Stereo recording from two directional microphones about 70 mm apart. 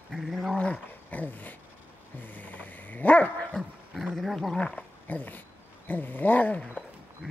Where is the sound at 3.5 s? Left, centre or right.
Centre.